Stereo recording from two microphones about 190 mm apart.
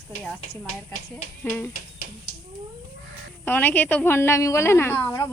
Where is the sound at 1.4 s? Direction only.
10° left (ahead or behind).